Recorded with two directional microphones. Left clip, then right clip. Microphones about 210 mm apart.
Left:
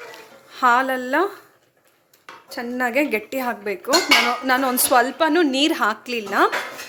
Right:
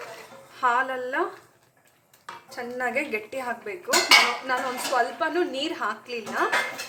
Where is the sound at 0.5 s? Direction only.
50° left (ahead or behind).